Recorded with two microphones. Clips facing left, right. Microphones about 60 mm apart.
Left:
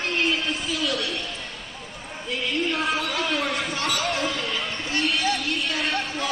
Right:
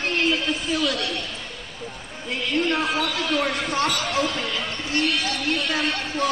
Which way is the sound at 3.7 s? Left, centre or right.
Right.